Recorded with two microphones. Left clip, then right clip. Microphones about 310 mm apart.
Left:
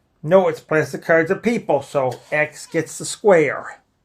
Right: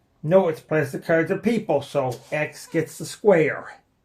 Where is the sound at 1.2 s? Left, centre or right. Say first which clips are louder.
Left 3 dB; centre.